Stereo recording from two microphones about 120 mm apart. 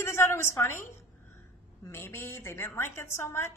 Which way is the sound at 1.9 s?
20° left (ahead or behind).